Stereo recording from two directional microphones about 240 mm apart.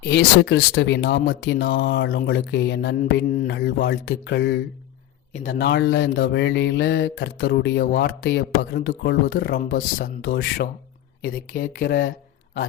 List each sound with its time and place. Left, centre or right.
0.0 s speech: left
5.3 s speech: left